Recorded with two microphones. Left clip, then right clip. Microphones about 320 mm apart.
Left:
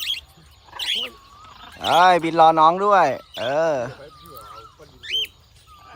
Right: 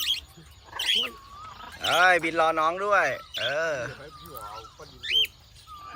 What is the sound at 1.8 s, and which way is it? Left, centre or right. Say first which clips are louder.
Speech: left 6 dB; centre.